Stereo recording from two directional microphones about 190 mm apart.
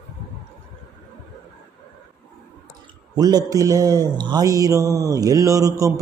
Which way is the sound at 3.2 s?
20° right (ahead or behind).